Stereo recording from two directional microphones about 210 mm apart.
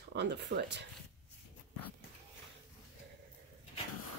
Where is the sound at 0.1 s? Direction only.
55° right (ahead or behind).